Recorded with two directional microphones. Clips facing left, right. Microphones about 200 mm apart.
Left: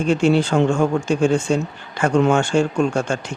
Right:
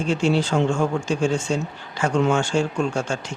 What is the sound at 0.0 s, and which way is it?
A man's voice, 55° left (ahead or behind).